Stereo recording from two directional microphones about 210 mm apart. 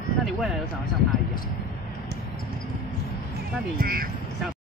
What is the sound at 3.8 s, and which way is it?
Speech, 45° right (ahead or behind).